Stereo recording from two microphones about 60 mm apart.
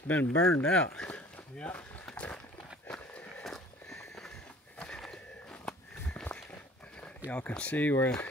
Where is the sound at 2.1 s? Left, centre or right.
Centre.